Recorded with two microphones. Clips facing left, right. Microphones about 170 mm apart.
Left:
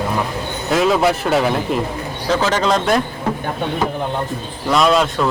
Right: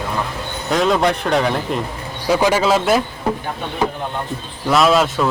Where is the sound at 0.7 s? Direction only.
5° left (ahead or behind).